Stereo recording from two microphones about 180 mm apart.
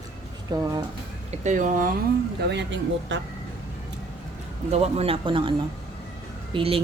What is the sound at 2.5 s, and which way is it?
Speech, 85° right.